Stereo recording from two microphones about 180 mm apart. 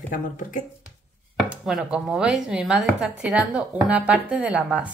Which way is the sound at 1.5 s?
5° right (ahead or behind).